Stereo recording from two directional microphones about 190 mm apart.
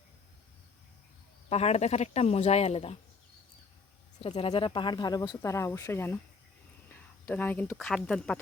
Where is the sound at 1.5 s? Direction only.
35° left (ahead or behind).